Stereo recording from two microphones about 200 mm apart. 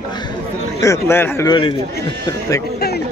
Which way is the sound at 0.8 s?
15° left (ahead or behind).